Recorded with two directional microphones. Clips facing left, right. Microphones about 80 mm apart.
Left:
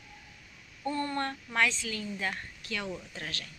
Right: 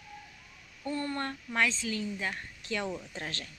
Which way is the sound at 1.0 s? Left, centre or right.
Centre.